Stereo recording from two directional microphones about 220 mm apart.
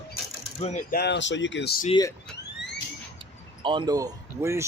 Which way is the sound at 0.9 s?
50° left (ahead or behind).